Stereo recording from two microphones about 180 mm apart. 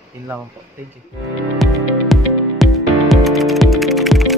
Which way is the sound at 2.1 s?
Centre (ahead or behind).